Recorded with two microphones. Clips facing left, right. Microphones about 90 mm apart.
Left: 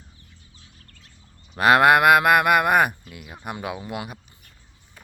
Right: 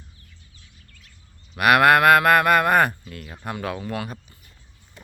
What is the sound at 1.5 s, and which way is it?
Speech, 25° left (ahead or behind).